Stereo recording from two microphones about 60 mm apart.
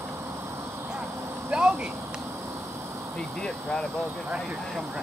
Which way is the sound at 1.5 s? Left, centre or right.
Centre.